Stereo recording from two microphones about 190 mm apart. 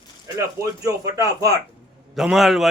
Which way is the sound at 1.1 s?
20° right (ahead or behind).